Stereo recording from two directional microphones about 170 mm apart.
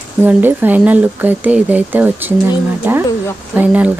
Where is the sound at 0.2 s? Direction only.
10° right (ahead or behind).